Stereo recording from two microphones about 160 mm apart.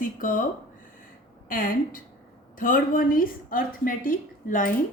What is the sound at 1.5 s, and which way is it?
A woman's voice, 60° left (ahead or behind).